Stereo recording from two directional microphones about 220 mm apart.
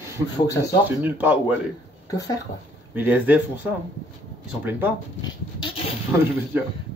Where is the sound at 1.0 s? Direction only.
5° right (ahead or behind).